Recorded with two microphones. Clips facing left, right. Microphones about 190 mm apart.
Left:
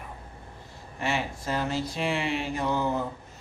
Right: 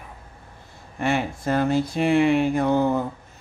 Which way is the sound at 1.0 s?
55° right (ahead or behind).